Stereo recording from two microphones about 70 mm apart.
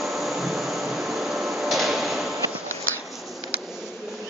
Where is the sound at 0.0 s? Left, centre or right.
Centre.